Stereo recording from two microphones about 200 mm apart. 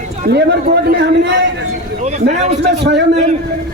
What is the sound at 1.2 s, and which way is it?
Speech, 65° right (ahead or behind).